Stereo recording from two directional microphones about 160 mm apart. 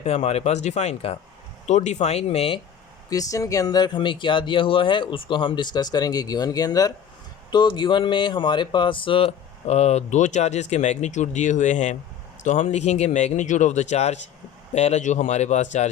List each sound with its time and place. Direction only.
0.0 s a man's voice: 45° left (ahead or behind)
3.1 s a man's voice: 20° left (ahead or behind); by 15.9 s 45° left (ahead or behind)